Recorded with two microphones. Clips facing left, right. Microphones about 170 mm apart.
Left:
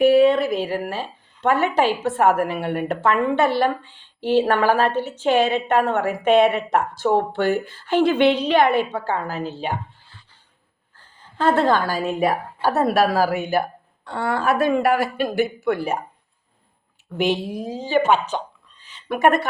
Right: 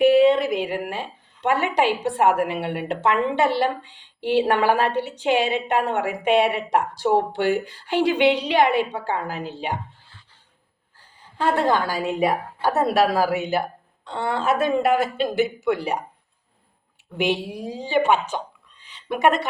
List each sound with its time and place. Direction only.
0.0 s a woman's voice: 15° right (ahead or behind)
11.2 s speech: 15° right (ahead or behind)
15.6 s speech: 55° left (ahead or behind)
17.2 s speech: 15° right (ahead or behind)
18.8 s a sound: 20° right (ahead or behind)